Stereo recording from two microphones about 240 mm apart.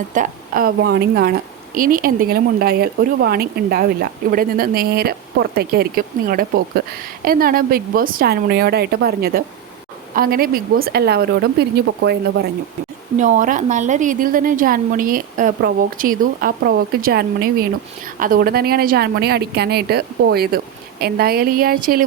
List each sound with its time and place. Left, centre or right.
0.1 s speech: right
13.1 s speech: right